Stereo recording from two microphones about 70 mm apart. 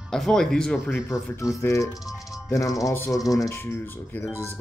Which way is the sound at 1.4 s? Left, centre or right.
Left.